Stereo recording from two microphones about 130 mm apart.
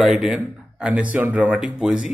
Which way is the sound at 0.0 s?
5° right (ahead or behind).